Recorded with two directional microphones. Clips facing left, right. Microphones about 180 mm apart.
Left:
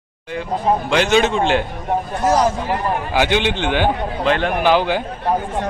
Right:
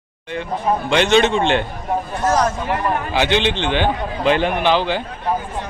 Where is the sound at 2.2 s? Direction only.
10° left (ahead or behind).